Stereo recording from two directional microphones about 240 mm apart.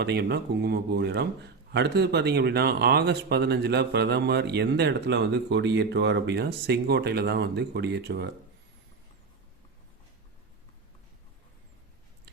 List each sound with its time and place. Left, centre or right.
0.0 s a man's voice: right